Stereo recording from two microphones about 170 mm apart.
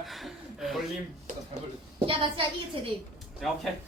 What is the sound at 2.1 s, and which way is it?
Speech, 30° right (ahead or behind).